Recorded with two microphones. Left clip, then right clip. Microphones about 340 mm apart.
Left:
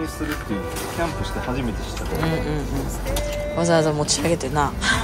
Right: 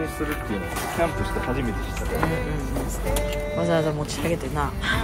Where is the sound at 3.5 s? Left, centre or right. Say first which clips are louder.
Left 5 dB; centre.